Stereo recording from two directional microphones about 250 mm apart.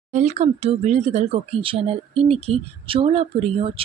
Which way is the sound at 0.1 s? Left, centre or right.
Right.